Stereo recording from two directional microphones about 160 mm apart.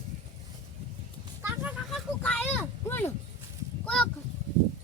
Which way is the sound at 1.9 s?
5° left (ahead or behind).